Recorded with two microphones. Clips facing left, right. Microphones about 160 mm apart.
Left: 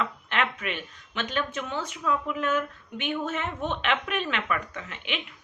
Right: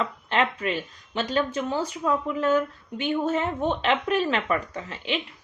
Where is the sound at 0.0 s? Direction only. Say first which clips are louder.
Right 4 dB; 30° right (ahead or behind).